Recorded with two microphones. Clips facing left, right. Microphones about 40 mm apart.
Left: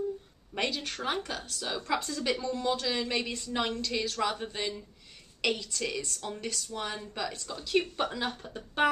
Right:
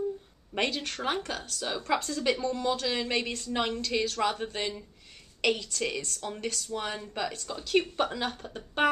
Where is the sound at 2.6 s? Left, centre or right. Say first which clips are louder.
Right 1 dB; centre.